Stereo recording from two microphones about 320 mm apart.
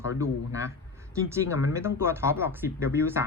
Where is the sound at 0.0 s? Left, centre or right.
Centre.